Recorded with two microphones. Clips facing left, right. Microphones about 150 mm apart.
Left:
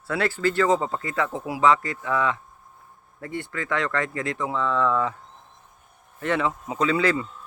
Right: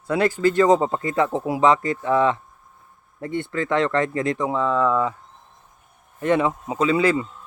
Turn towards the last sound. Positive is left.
turn(degrees=-20)  # may be behind; listen again after turning